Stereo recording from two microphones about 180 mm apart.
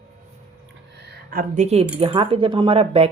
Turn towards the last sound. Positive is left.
turn(degrees=-35)  # may be behind; listen again after turning